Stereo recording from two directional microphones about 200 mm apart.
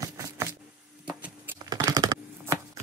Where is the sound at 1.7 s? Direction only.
20° right (ahead or behind).